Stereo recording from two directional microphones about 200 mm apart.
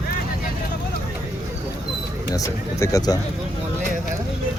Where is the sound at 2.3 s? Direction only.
15° left (ahead or behind).